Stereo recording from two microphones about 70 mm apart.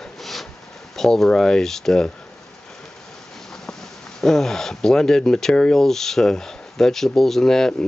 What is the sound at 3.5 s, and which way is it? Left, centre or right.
Speech, centre.